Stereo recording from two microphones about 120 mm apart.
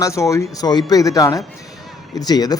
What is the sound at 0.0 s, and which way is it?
A man's voice, 25° left (ahead or behind).